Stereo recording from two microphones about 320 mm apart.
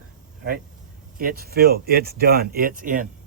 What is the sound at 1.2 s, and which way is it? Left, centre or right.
Speech, right.